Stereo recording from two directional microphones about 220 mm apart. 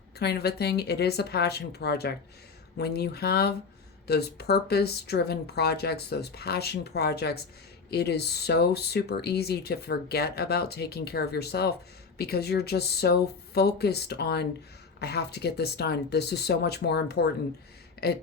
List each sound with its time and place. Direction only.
0.2 s speech: 50° left (ahead or behind)